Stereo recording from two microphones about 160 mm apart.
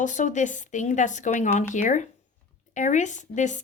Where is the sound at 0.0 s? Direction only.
50° left (ahead or behind).